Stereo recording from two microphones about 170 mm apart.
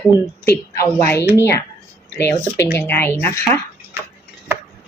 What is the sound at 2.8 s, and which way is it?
Speech, 10° left (ahead or behind).